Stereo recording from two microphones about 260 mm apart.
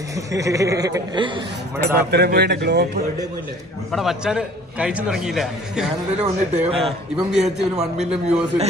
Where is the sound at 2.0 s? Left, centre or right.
Right.